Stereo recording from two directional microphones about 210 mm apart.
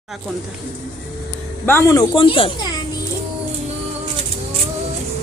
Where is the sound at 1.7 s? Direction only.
10° left (ahead or behind).